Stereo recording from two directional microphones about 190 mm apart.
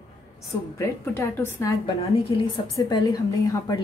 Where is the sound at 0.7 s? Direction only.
15° left (ahead or behind).